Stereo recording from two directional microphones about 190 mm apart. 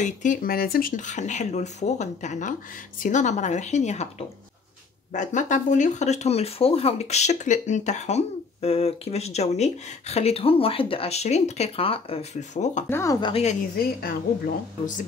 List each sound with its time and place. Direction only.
0.0 s speech: 40° left (ahead or behind)
12.9 s speech: 15° left (ahead or behind)
13.3 s speech: 35° left (ahead or behind)
13.7 s a woman's voice: 50° left (ahead or behind)